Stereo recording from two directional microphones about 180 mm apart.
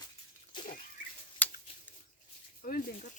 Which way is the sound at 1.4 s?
10° left (ahead or behind).